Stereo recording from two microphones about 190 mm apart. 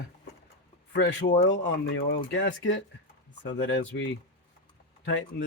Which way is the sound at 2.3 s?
75° left (ahead or behind).